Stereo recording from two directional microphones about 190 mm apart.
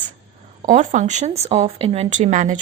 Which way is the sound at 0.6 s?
40° right (ahead or behind).